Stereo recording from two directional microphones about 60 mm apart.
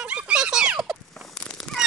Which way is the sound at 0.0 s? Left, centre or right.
Centre.